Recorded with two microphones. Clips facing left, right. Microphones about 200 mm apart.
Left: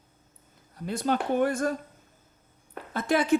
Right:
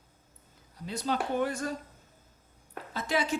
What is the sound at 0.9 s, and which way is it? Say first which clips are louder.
Speech: left 4 dB; 55° left (ahead or behind).